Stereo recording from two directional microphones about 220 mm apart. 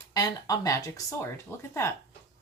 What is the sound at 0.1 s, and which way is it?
Speech, 15° left (ahead or behind).